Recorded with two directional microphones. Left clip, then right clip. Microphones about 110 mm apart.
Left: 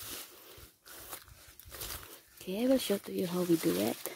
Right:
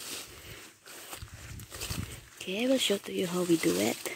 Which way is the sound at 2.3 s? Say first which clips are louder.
Right 2 dB; 45° left (ahead or behind).